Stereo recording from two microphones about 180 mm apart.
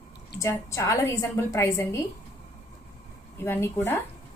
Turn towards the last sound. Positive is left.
turn(degrees=10)  # may be behind; listen again after turning